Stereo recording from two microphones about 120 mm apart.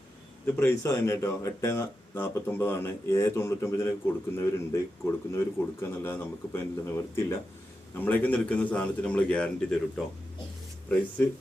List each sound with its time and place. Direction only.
0.4 s a man's voice: 20° left (ahead or behind)